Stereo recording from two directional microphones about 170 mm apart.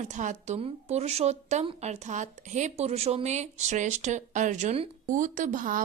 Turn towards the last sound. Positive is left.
turn(degrees=-50)  # may be behind; listen again after turning